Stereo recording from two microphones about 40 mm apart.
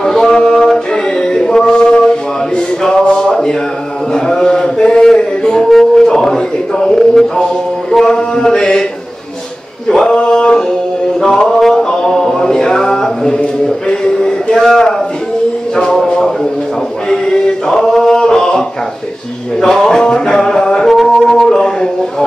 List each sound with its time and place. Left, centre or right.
0.0 s music: centre
2.8 s a sound: left
4.1 s music: centre
5.7 s a sound: centre
7.9 s mantra: centre
8.2 s mantra: left
9.8 s male singing: centre
10.1 s singing: left
11.1 s a sound: centre
17.1 s music: centre
19.6 s a sound: centre
21.3 s music: centre